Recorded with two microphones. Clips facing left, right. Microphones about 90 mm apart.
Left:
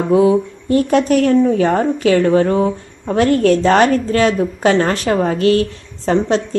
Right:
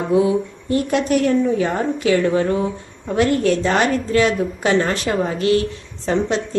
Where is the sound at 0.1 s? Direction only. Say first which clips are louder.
Left 4 dB; 40° left (ahead or behind).